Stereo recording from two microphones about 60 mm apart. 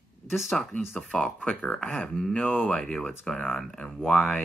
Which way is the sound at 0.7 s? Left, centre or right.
Left.